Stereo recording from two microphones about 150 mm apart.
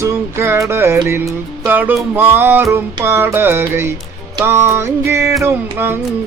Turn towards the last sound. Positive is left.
turn(degrees=-15)  # may be behind; listen again after turning